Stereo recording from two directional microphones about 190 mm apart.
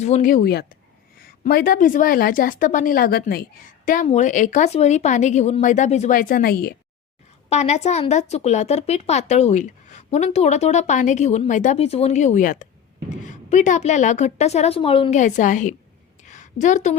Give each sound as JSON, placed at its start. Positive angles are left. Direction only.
{"t": 0.0, "sound": "a woman's voice", "side_deg": 40}
{"t": 4.0, "sound": "speech", "side_deg": 40}
{"t": 7.5, "sound": "speech", "side_deg": 35}
{"t": 15.2, "sound": "speech", "side_deg": 40}
{"t": 16.2, "sound": "a sound", "side_deg": 40}